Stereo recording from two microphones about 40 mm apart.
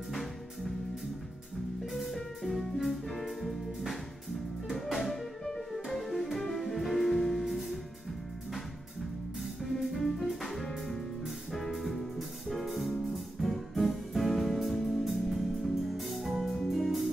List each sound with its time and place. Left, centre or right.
0.1 s music: centre
1.9 s music: centre
9.4 s music: centre